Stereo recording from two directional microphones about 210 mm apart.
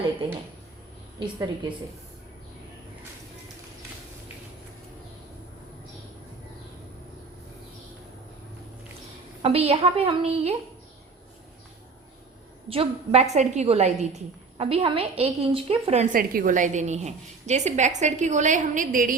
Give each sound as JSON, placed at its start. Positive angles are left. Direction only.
{"t": 9.4, "sound": "a woman's voice", "side_deg": -30}
{"t": 12.6, "sound": "a woman's voice", "side_deg": -25}